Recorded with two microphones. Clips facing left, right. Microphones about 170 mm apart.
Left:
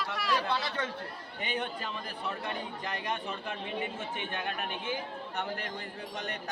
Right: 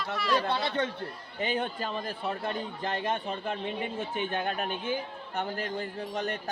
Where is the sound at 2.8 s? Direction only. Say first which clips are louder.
Right 6 dB; 25° right (ahead or behind).